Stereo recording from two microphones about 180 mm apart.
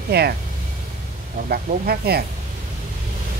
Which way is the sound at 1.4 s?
55° right (ahead or behind).